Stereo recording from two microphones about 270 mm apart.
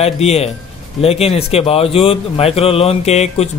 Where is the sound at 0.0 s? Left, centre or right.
Left.